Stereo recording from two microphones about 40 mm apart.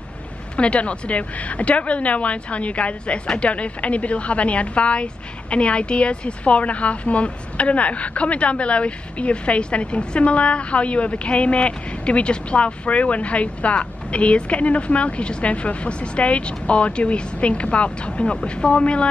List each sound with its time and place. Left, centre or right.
0.6 s a woman's voice: left